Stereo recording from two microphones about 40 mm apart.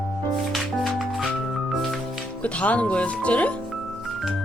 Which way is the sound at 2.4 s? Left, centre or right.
Left.